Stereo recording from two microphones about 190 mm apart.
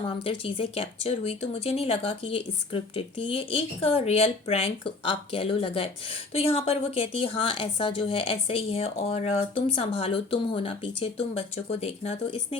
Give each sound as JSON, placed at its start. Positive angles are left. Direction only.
{"t": 0.3, "sound": "a woman's voice", "side_deg": 30}